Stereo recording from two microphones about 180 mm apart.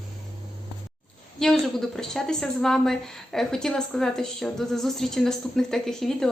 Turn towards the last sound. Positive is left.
turn(degrees=5)  # may be behind; listen again after turning